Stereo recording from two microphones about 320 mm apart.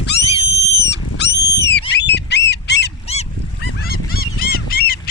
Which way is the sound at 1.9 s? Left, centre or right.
Left.